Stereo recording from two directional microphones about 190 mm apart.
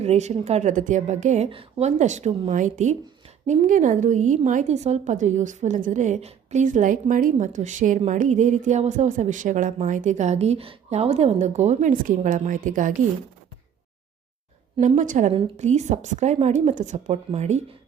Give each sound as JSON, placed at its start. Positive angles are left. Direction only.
{"t": 0.0, "sound": "a woman's voice", "side_deg": -35}
{"t": 14.8, "sound": "a woman's voice", "side_deg": -40}